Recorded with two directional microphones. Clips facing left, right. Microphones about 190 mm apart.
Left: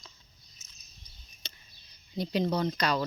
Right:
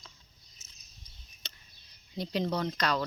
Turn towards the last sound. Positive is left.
turn(degrees=5)  # may be behind; listen again after turning